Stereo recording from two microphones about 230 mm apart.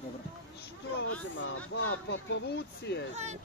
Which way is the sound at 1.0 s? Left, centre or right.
Left.